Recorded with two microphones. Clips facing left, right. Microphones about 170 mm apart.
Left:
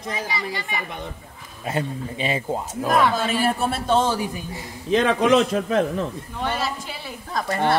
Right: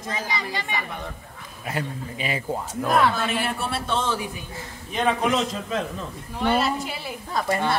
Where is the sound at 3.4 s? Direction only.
45° left (ahead or behind).